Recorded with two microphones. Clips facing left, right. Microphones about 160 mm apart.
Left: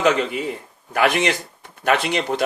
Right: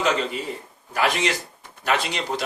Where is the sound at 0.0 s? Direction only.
60° left (ahead or behind).